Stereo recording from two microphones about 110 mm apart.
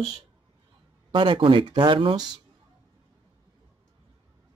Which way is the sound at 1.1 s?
50° right (ahead or behind).